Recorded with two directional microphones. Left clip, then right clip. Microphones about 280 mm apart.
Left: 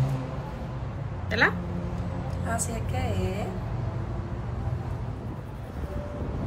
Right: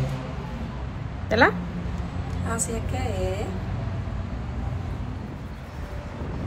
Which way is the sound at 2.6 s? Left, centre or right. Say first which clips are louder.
Right 2 dB; centre.